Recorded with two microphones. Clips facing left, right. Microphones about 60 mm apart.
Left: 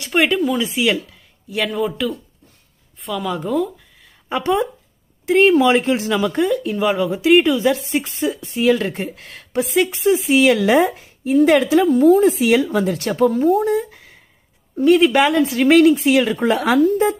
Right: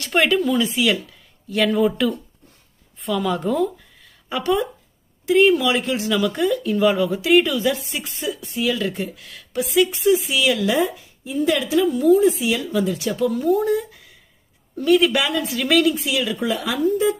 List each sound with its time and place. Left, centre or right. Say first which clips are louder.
0.0 s speech: left 1 dB; centre
4.3 s speech: left 2 dB; left
10.6 s a woman's voice: left 5 dB; left
12.6 s a woman's voice: left 2 dB; left
13.2 s speech: left 4 dB; left
16.5 s speech: left 9 dB; left